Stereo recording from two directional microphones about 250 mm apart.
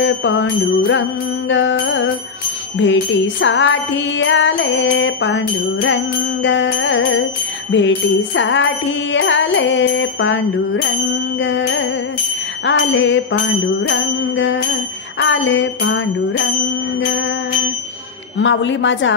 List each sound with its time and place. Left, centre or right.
0.0 s jingle bell: left
18.4 s jingle bell: left